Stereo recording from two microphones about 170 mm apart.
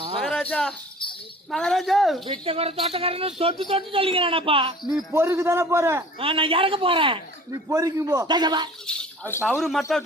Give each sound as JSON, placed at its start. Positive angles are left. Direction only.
{"t": 0.2, "sound": "cricket", "side_deg": 5}
{"t": 1.5, "sound": "speech", "side_deg": 0}
{"t": 2.2, "sound": "speech", "side_deg": -30}
{"t": 4.9, "sound": "a man's voice", "side_deg": -15}
{"t": 6.1, "sound": "speech", "side_deg": -30}
{"t": 7.5, "sound": "a man's voice", "side_deg": -20}
{"t": 8.9, "sound": "speech", "side_deg": 10}